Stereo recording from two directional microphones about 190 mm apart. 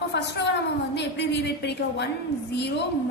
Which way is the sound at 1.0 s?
65° left (ahead or behind).